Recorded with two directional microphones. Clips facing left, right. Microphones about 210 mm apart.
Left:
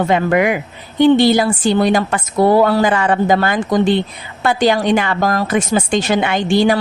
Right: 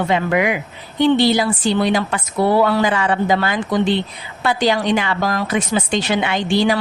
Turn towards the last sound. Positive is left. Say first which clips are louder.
# left 3 dB
turn(degrees=50)  # may be behind; listen again after turning